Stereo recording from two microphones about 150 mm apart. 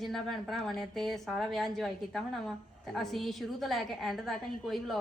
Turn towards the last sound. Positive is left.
turn(degrees=0)  # may be behind; listen again after turning